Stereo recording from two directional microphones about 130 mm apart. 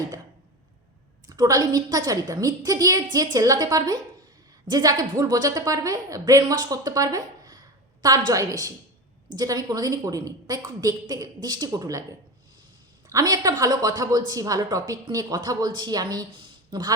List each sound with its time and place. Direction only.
1.3 s a woman's voice: 30° right (ahead or behind)
13.1 s a woman's voice: 25° right (ahead or behind)